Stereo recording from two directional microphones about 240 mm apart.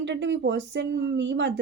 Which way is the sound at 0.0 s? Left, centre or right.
Right.